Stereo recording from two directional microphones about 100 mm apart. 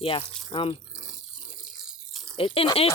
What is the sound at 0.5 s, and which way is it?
Speech, 65° left (ahead or behind).